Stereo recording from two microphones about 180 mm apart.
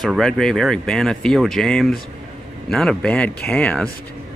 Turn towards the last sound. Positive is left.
turn(degrees=5)  # may be behind; listen again after turning